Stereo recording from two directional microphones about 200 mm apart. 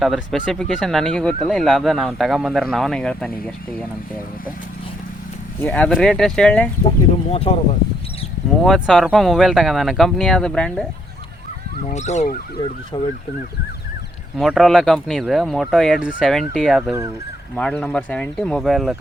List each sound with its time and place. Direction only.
0.0 s speech: centre (ahead or behind)
5.6 s speech: 5° left (ahead or behind)
7.3 s speech: 30° left (ahead or behind)
8.6 s speech: centre (ahead or behind)
11.9 s speech: 35° left (ahead or behind)
12.9 s speech: 25° left (ahead or behind)
14.3 s speech: centre (ahead or behind)